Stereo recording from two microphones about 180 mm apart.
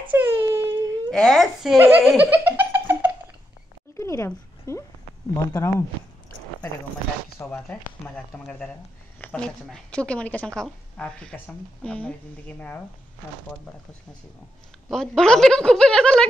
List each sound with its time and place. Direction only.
0.1 s a sound: 15° right (ahead or behind)
1.1 s speech: centre (ahead or behind)
3.9 s a sound: 15° left (ahead or behind)
5.3 s a woman's voice: 15° left (ahead or behind)
7.4 s a woman's voice: 5° left (ahead or behind)
14.9 s speech: 5° left (ahead or behind)